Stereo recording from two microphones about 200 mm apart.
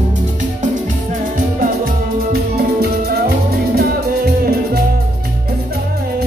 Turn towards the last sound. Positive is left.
turn(degrees=-50)  # may be behind; listen again after turning